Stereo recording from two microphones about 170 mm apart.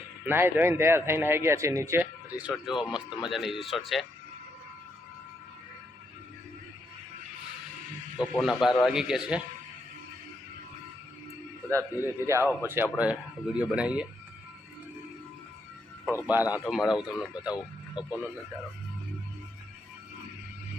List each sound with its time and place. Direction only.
0.3 s speech: 10° right (ahead or behind)
2.5 s speech: 5° right (ahead or behind)
8.2 s speech: centre (ahead or behind)
11.7 s speech: 15° right (ahead or behind)
16.2 s speech: 10° right (ahead or behind)